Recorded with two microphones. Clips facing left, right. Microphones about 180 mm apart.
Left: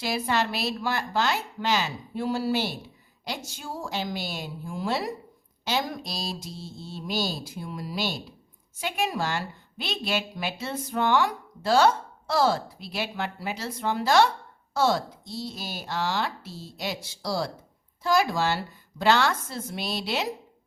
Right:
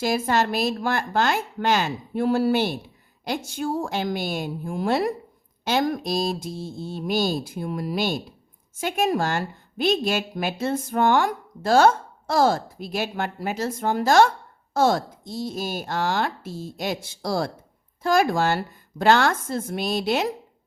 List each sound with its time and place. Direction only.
0.0 s a woman's voice: 45° right (ahead or behind)